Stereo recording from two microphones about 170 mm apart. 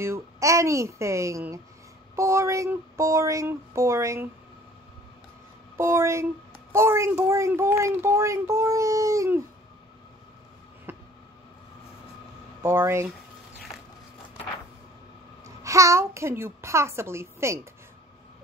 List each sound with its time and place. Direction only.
0.0 s a woman's voice: 15° right (ahead or behind)
5.8 s a woman's voice: 15° right (ahead or behind)
10.9 s a sound: 10° right (ahead or behind)
12.6 s a woman's voice: 15° right (ahead or behind)
15.4 s a child's voice: 20° right (ahead or behind)